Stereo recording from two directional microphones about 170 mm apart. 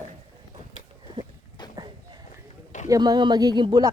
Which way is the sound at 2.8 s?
20° right (ahead or behind).